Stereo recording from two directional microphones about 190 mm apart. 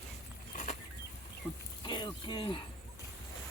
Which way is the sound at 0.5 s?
40° left (ahead or behind).